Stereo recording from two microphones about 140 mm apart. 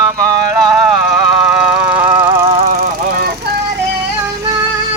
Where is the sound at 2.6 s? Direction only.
90° right.